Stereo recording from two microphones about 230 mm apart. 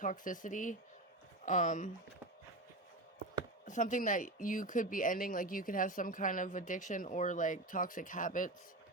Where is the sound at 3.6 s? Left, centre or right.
Left.